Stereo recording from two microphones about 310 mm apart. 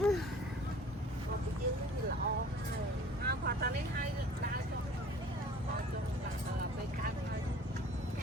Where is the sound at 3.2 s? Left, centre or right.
Right.